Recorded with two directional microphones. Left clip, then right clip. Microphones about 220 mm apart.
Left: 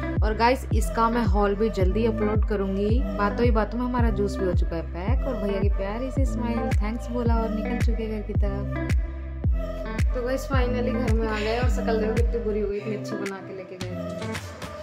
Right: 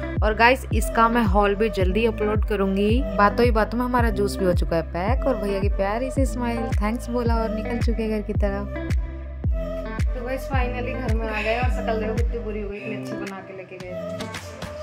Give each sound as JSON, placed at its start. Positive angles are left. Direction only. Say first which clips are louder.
{"t": 0.2, "sound": "speech", "louder": "right 5 dB", "side_deg": -20}
{"t": 10.2, "sound": "speech", "louder": "even", "side_deg": 5}